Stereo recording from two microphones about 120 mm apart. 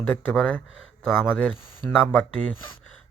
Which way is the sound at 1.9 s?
5° left (ahead or behind).